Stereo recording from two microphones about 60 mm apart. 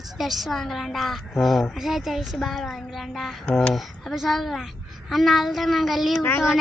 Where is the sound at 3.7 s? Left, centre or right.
Centre.